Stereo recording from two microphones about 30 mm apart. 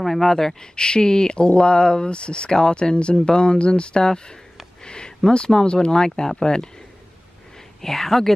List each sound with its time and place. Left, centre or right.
0.0 s speech: centre
0.6 s speech: left
4.0 s speech: left
7.8 s speech: centre